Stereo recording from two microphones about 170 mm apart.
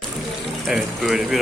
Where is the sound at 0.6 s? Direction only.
Centre (ahead or behind).